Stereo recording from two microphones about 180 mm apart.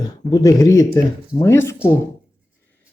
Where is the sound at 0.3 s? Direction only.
20° left (ahead or behind).